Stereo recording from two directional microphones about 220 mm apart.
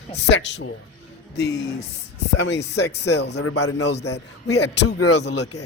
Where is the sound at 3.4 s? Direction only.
70° left (ahead or behind).